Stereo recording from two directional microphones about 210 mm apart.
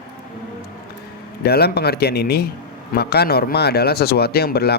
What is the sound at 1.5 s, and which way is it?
Speech, 50° left (ahead or behind).